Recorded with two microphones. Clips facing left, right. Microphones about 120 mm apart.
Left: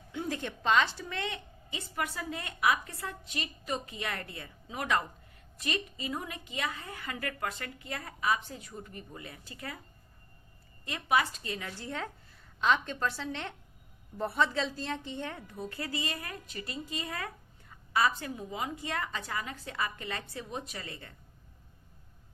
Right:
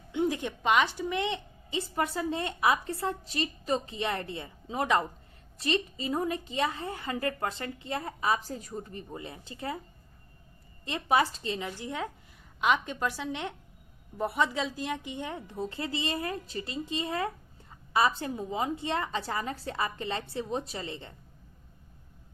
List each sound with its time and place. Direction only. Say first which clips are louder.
0.1 s a woman's voice: right 6 dB; 20° right (ahead or behind)
10.8 s a woman's voice: right 3 dB; 25° right (ahead or behind)